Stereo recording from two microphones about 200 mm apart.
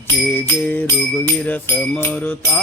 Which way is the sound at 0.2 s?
10° left (ahead or behind).